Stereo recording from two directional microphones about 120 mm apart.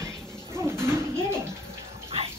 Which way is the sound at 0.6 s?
20° right (ahead or behind).